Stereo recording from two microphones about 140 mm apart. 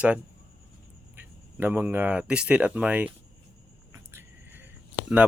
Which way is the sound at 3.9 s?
15° right (ahead or behind).